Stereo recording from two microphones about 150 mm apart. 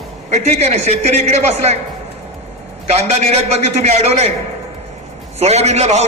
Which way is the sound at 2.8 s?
45° right (ahead or behind).